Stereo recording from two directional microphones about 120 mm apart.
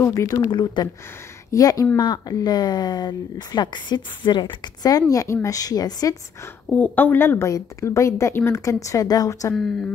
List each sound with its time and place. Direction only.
0.0 s a woman's voice: 25° left (ahead or behind)
0.5 s speech: 40° left (ahead or behind)
1.5 s a woman's voice: 30° left (ahead or behind)
6.7 s a woman's voice: 15° left (ahead or behind); by 9.5 s 30° left (ahead or behind)